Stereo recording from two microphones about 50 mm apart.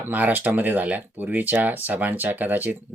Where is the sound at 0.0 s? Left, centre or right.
Right.